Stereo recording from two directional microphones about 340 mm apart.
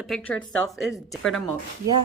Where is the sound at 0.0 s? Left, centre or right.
Centre.